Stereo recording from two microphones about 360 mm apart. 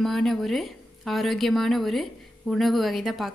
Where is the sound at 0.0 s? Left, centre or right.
Centre.